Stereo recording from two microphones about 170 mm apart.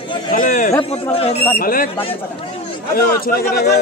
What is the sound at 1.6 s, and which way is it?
Speech, 55° left (ahead or behind).